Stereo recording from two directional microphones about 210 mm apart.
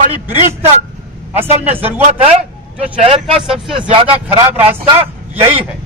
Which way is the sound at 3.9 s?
25° right (ahead or behind).